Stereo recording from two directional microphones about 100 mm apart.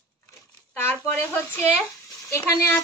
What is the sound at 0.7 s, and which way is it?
Speech, 20° left (ahead or behind).